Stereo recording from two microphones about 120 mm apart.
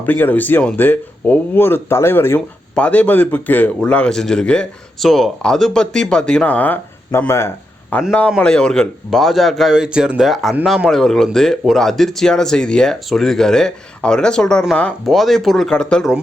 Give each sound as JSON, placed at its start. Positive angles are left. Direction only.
{"t": 0.0, "sound": "a man's voice", "side_deg": 15}
{"t": 8.4, "sound": "speech", "side_deg": 5}